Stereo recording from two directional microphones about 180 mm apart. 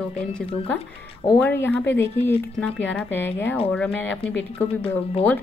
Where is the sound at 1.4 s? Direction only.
10° left (ahead or behind).